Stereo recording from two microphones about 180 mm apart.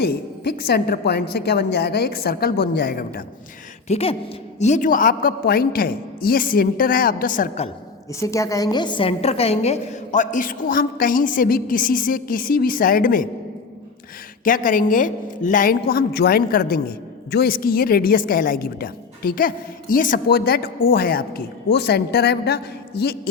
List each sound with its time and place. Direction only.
0.0 s a woman's voice: 65° left (ahead or behind)
3.8 s speech: 35° left (ahead or behind)
4.6 s a woman's voice: 45° left (ahead or behind)
8.2 s a woman's voice: 15° left (ahead or behind); by 13.2 s 50° left (ahead or behind)
14.4 s a woman's voice: 50° left (ahead or behind)